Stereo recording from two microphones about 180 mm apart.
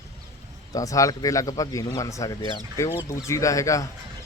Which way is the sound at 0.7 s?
20° left (ahead or behind).